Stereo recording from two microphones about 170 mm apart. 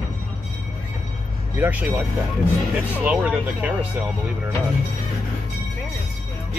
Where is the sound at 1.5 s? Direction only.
10° right (ahead or behind).